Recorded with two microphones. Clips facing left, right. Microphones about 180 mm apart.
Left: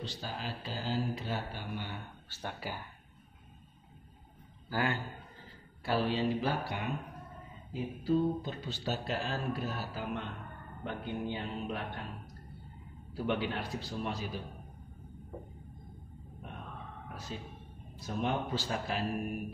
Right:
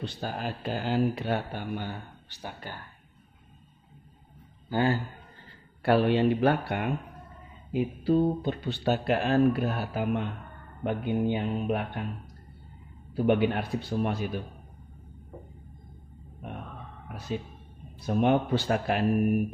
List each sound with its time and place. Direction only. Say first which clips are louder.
0.0 s speech: right 7 dB; 55° right (ahead or behind)
2.2 s speech: even; 15° right (ahead or behind)
4.6 s a man's voice: right 7 dB; 25° right (ahead or behind)
5.8 s speech: right 9 dB; 65° right (ahead or behind)
13.1 s speech: right 9 dB; 55° right (ahead or behind)
17.1 s speech: right 10 dB; 60° right (ahead or behind)